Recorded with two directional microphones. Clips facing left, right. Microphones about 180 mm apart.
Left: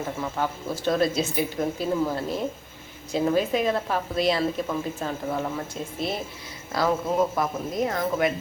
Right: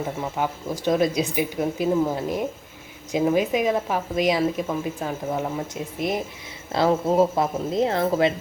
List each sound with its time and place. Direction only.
0.0 s speech: 15° right (ahead or behind)
6.7 s speech: 30° right (ahead or behind)